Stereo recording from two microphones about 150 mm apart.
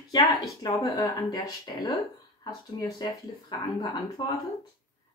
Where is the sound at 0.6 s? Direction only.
25° left (ahead or behind).